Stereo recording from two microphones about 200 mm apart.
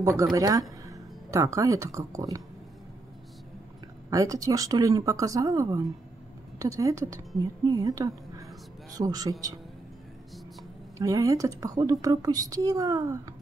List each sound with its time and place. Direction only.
0.0 s speech: 15° right (ahead or behind)
4.1 s a woman's voice: 15° right (ahead or behind)
11.0 s a woman's voice: 15° right (ahead or behind)